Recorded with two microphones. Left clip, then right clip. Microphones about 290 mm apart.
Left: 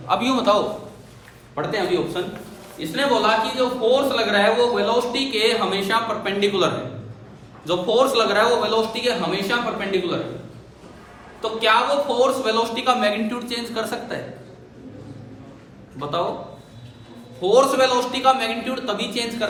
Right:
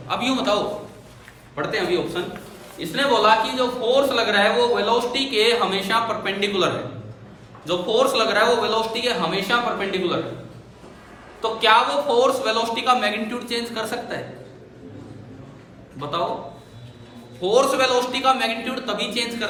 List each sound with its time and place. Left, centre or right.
0.1 s a man's voice: centre
1.5 s a man's voice: centre
11.3 s a man's voice: centre
17.4 s a man's voice: centre